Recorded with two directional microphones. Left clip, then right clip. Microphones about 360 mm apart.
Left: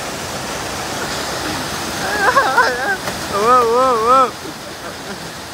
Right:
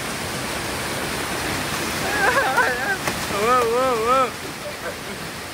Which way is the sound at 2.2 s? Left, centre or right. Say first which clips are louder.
Left 6 dB; centre.